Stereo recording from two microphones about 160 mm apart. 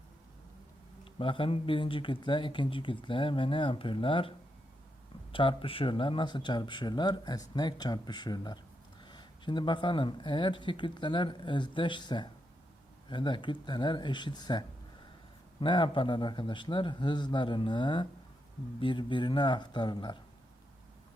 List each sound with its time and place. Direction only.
1.2 s speech: 35° left (ahead or behind)
15.6 s speech: 30° left (ahead or behind)